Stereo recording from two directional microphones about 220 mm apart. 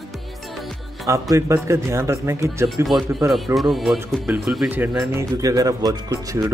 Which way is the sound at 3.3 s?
Centre (ahead or behind).